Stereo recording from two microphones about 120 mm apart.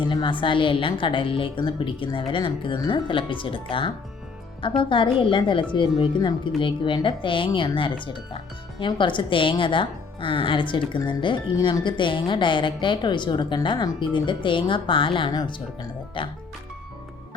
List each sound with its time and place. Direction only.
0.0 s a woman's voice: 40° left (ahead or behind)